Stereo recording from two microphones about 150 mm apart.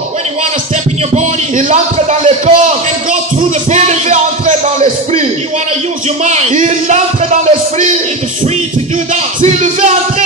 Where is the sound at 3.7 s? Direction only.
50° right (ahead or behind).